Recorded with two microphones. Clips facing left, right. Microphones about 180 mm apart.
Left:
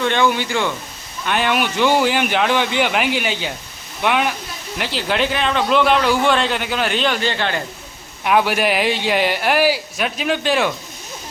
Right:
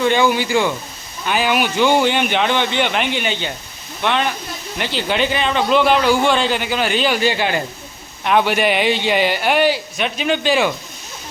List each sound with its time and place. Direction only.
0.0 s speech: 5° right (ahead or behind)
8.2 s speech: 5° left (ahead or behind)